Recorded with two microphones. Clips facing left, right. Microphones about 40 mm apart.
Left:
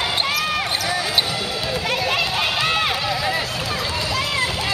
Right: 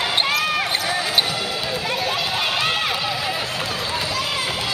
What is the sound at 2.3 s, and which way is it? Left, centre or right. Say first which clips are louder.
Run: left 1 dB; centre.